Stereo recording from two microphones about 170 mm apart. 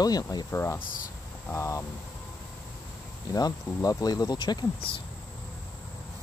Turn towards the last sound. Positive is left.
turn(degrees=25)  # may be behind; listen again after turning